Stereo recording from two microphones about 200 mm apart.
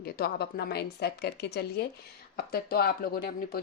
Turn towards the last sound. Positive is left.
turn(degrees=45)  # may be behind; listen again after turning